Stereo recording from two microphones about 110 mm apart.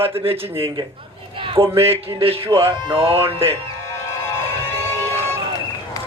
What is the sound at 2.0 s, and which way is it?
Speech, 60° right (ahead or behind).